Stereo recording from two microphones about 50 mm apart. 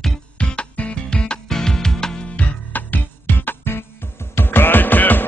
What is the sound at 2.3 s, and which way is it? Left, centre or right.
Music, left.